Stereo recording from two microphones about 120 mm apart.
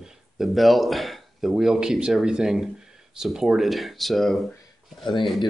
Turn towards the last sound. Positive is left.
turn(degrees=0)  # may be behind; listen again after turning